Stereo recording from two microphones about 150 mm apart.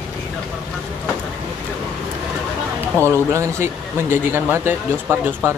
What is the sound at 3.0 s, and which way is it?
Speech, 15° left (ahead or behind).